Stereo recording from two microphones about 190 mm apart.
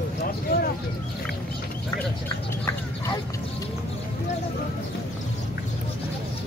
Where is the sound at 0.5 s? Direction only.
55° left (ahead or behind).